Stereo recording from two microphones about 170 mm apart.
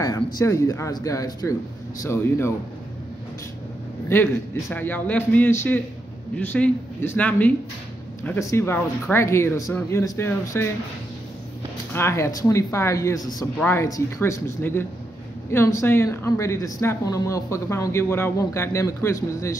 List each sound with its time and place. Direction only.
0.0 s speech: 20° left (ahead or behind)
4.1 s speech: 10° left (ahead or behind)
11.9 s speech: 15° left (ahead or behind)